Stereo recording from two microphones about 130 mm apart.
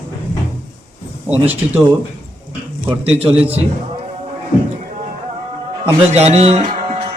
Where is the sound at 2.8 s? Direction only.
10° right (ahead or behind).